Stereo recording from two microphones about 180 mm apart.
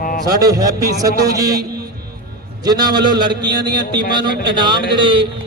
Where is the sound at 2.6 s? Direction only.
20° right (ahead or behind).